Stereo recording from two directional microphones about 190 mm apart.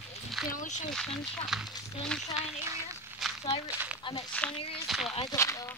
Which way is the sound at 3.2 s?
Centre (ahead or behind).